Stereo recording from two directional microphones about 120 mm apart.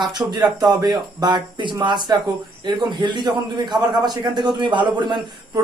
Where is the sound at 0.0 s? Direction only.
35° right (ahead or behind).